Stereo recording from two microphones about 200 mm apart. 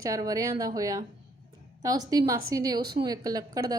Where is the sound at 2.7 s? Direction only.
55° right (ahead or behind).